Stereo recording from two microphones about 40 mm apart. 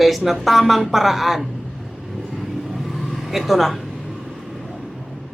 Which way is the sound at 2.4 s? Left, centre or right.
Centre.